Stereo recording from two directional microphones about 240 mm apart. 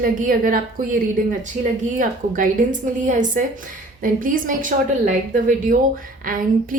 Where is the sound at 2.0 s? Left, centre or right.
Right.